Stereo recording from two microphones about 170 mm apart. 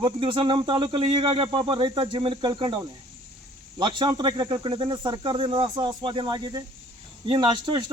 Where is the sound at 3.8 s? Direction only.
25° right (ahead or behind).